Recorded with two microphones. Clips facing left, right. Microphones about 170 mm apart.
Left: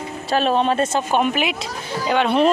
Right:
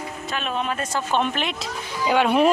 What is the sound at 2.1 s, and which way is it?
Speech, 10° right (ahead or behind).